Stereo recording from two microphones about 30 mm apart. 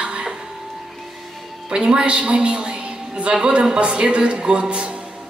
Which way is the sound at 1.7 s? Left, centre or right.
Right.